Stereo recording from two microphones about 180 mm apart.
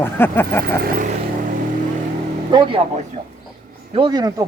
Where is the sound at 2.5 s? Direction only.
25° right (ahead or behind).